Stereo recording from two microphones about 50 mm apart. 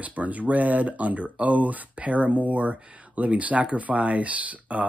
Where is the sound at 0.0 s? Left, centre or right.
Right.